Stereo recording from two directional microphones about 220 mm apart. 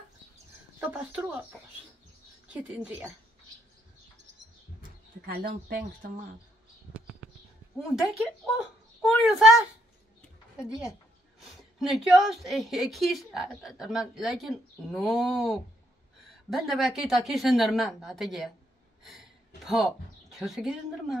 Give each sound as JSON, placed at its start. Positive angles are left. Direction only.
{"t": 0.7, "sound": "speech", "side_deg": -5}
{"t": 2.4, "sound": "a woman's voice", "side_deg": -5}
{"t": 5.2, "sound": "speech", "side_deg": -45}
{"t": 7.7, "sound": "a woman's voice", "side_deg": 0}
{"t": 19.0, "sound": "a sound", "side_deg": 0}